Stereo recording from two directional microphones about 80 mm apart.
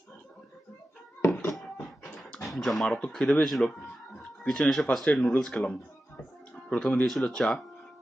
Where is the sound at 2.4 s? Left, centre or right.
Centre.